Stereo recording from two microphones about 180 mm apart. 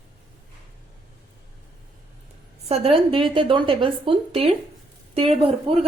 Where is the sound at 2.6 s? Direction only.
35° right (ahead or behind).